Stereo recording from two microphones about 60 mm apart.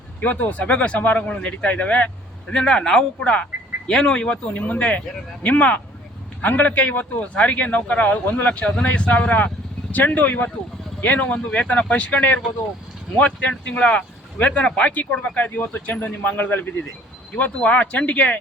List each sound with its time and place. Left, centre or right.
0.2 s speech: left
2.5 s speech: centre